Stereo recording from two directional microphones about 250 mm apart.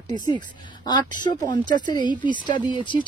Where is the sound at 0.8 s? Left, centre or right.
Centre.